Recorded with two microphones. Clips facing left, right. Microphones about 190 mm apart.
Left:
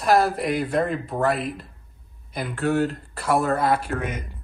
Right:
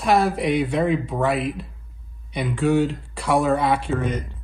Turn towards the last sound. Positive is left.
turn(degrees=0)  # may be behind; listen again after turning